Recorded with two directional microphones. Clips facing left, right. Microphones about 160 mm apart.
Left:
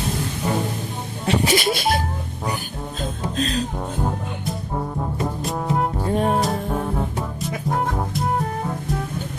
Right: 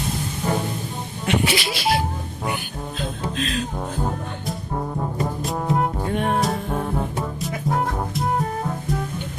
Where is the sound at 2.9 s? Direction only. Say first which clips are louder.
Left 2 dB; 40° left (ahead or behind).